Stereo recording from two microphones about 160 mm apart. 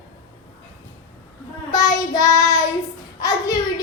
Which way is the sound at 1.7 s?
20° left (ahead or behind).